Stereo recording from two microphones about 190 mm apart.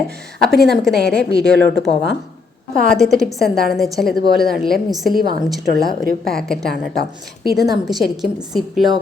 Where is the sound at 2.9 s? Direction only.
Centre (ahead or behind).